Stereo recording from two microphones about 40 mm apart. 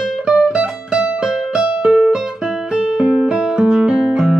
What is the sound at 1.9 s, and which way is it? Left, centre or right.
Guitar, centre.